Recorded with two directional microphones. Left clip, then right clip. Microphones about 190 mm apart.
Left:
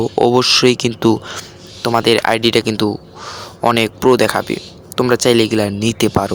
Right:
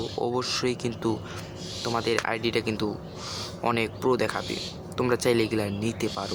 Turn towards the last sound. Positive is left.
turn(degrees=45)  # may be behind; listen again after turning